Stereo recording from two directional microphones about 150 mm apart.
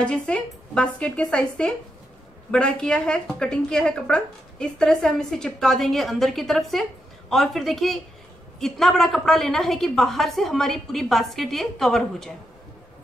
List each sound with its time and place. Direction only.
0.0 s a woman's voice: 5° left (ahead or behind)